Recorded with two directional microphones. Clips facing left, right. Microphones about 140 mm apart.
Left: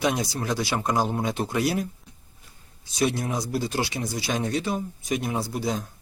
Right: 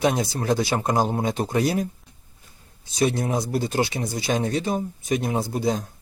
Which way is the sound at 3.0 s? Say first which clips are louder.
Right 3 dB; 40° right (ahead or behind).